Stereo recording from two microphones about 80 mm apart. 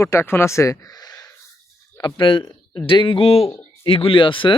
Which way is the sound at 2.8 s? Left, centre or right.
Left.